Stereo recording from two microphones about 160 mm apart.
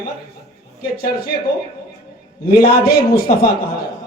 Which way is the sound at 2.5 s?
70° left (ahead or behind).